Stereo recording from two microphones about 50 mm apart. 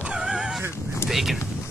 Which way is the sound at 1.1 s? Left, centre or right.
Centre.